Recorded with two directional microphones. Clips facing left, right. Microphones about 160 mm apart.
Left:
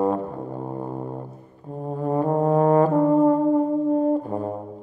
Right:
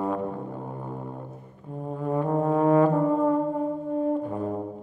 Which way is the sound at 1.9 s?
35° left (ahead or behind).